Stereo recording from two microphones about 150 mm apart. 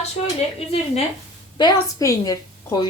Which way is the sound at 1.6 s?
30° left (ahead or behind).